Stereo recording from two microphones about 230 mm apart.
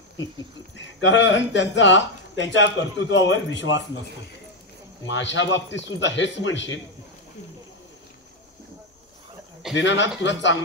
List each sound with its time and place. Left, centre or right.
0.7 s speech: left
5.0 s speech: left
9.8 s speech: left